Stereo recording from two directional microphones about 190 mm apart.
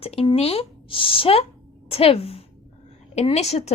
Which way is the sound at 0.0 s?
30° left (ahead or behind).